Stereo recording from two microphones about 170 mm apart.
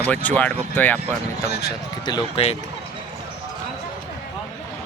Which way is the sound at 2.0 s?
25° left (ahead or behind).